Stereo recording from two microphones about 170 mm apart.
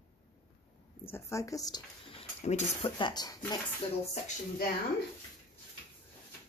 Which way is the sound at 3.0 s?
25° left (ahead or behind).